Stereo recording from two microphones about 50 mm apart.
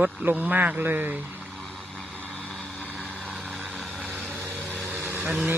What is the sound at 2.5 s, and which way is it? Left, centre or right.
Vehicle, centre.